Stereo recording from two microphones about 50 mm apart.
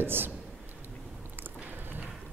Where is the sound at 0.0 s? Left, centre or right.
Right.